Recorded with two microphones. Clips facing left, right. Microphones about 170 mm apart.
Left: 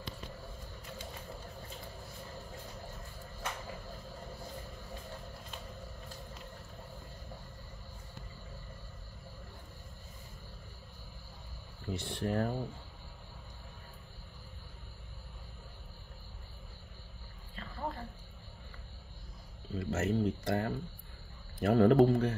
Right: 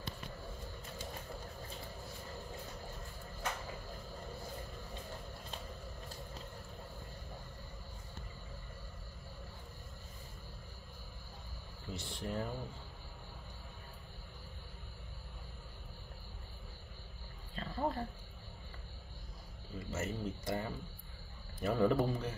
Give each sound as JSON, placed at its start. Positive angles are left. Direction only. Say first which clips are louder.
{"t": 11.9, "sound": "speech", "louder": "left 6 dB", "side_deg": 60}
{"t": 17.6, "sound": "dog", "louder": "right 4 dB", "side_deg": -30}
{"t": 19.8, "sound": "a sound", "louder": "left 8 dB", "side_deg": 65}
{"t": 21.5, "sound": "speech", "louder": "left 7 dB", "side_deg": 65}